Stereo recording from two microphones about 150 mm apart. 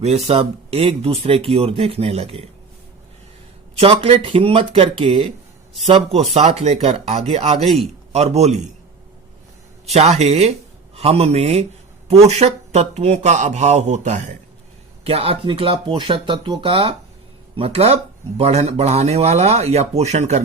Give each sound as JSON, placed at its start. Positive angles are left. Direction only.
{"t": 0.0, "sound": "speech", "side_deg": -45}
{"t": 3.8, "sound": "speech", "side_deg": -40}
{"t": 6.3, "sound": "speech", "side_deg": -40}
{"t": 9.9, "sound": "speech", "side_deg": -45}
{"t": 15.0, "sound": "speech", "side_deg": -40}